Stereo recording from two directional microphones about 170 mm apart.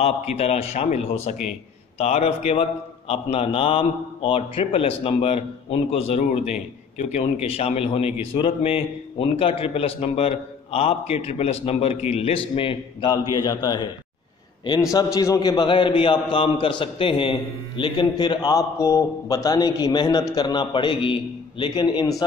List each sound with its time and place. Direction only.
0.0 s a man's voice: 40° left (ahead or behind)